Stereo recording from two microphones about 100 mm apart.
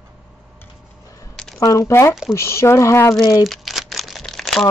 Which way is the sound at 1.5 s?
35° left (ahead or behind).